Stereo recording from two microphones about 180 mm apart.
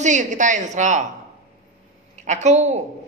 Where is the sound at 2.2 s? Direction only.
40° right (ahead or behind).